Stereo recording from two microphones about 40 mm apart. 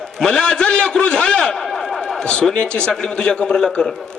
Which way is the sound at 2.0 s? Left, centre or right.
Centre.